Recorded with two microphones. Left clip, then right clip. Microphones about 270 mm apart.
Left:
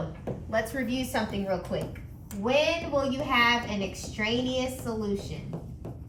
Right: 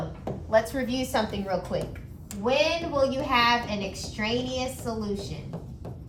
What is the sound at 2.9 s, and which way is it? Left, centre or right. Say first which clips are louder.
A woman's voice: right 2 dB; centre.